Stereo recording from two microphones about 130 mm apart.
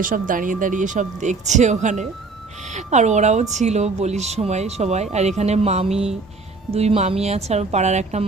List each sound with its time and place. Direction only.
0.0 s speech: 90° right; by 8.2 s 60° right (ahead or behind)